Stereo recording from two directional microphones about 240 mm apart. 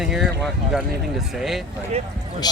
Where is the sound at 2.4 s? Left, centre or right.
Centre.